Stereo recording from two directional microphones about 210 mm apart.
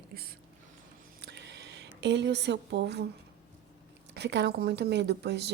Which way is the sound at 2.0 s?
55° right (ahead or behind).